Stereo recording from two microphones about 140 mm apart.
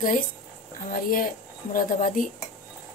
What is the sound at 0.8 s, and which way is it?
Speech, 70° left (ahead or behind).